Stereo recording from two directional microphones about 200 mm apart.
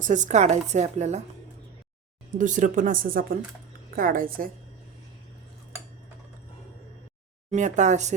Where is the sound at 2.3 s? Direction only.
40° right (ahead or behind).